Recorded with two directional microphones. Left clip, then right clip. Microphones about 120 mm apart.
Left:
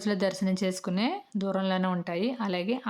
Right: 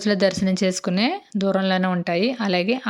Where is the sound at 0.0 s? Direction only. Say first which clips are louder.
Right 9 dB; 30° right (ahead or behind).